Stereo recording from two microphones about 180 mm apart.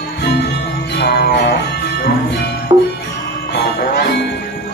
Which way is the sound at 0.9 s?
65° left (ahead or behind).